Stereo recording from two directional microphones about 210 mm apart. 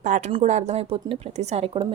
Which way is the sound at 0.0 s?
30° right (ahead or behind).